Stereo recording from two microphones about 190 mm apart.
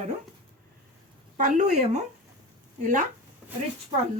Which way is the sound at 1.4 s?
40° right (ahead or behind).